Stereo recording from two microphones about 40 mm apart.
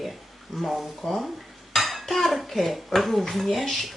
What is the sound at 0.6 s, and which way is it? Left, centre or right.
Speech, centre.